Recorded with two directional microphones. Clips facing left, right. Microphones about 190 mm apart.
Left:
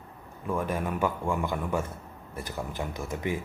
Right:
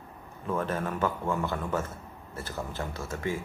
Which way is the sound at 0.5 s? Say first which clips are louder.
Left 1 dB; 10° left (ahead or behind).